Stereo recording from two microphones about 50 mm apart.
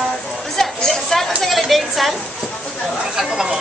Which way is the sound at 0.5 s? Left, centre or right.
Centre.